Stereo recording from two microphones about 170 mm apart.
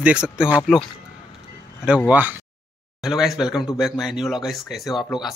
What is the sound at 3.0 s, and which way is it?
Speech, centre (ahead or behind).